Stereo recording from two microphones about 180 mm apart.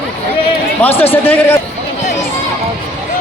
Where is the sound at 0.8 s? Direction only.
10° left (ahead or behind).